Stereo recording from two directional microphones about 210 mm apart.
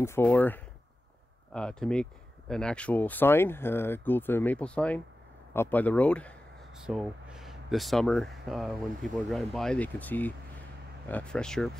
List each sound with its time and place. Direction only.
0.0 s speech: 10° left (ahead or behind)